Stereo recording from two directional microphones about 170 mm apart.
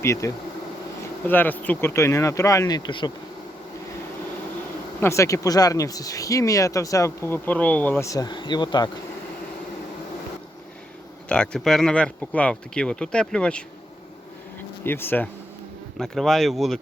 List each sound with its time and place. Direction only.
0.0 s speech: 15° left (ahead or behind)
4.9 s speech: 15° left (ahead or behind)
11.3 s speech: 5° left (ahead or behind)
14.8 s speech: 10° left (ahead or behind)